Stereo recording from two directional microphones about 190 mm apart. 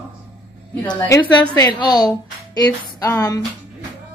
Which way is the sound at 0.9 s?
15° left (ahead or behind).